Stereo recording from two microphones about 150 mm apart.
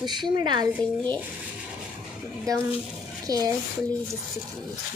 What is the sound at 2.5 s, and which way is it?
A child's voice, 20° right (ahead or behind).